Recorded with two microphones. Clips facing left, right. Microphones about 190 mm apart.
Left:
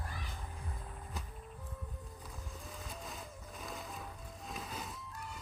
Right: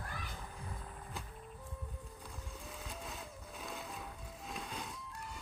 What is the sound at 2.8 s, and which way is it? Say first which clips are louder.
Vehicle: even; centre (ahead or behind).